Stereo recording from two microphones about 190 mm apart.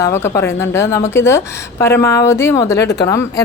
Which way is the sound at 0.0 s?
15° left (ahead or behind).